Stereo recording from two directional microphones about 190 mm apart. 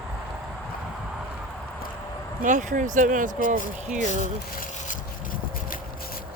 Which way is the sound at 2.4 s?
40° right (ahead or behind).